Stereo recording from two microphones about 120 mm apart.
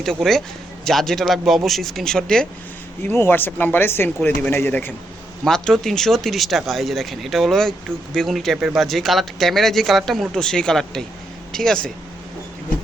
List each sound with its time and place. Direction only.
0.0 s speech: 5° left (ahead or behind)
3.0 s speech: 20° left (ahead or behind)
5.5 s speech: 5° left (ahead or behind)